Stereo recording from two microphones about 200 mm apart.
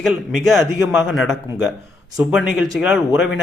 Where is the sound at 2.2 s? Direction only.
Centre (ahead or behind).